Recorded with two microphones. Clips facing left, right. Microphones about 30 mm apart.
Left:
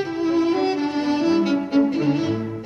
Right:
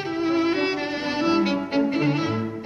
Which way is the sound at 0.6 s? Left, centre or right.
Centre.